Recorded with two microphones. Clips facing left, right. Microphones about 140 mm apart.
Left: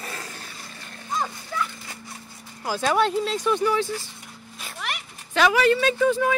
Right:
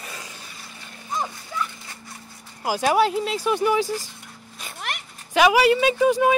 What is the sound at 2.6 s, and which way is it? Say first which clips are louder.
A woman's voice: right 2 dB; 10° right (ahead or behind).